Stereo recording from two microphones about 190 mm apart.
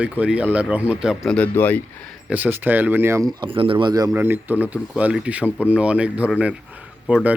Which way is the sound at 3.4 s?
25° right (ahead or behind).